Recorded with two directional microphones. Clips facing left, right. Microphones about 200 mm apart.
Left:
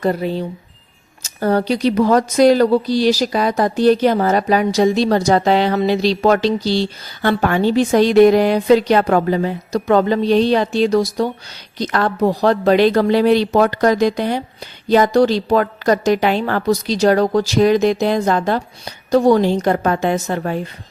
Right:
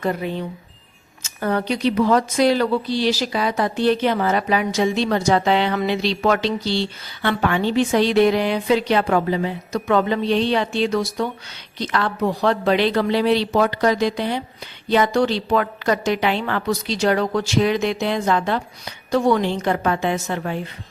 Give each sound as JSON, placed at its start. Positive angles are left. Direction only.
{"t": 0.0, "sound": "a woman's voice", "side_deg": 35}